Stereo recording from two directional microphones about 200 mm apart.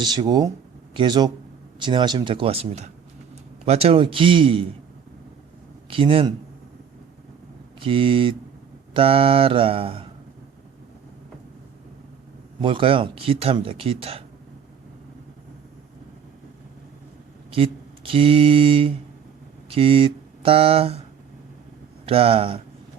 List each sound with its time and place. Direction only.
0.0 s speech: 20° right (ahead or behind)
5.9 s speech: 25° right (ahead or behind)
7.8 s speech: 25° right (ahead or behind)
12.6 s speech: 25° right (ahead or behind)
17.5 s speech: 25° right (ahead or behind)
22.0 s speech: 30° right (ahead or behind)